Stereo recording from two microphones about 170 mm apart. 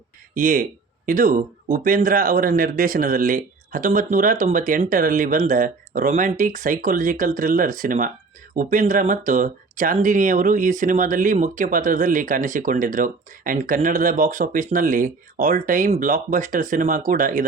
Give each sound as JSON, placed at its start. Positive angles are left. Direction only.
{"t": 0.3, "sound": "speech", "side_deg": -50}